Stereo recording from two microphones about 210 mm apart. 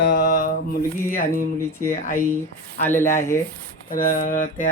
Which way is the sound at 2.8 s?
10° left (ahead or behind).